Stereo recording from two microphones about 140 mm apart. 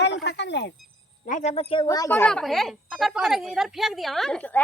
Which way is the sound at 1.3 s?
65° left (ahead or behind).